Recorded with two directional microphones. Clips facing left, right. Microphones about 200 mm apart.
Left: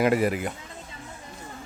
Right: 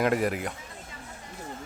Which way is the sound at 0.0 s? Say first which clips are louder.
Left 3 dB; centre (ahead or behind).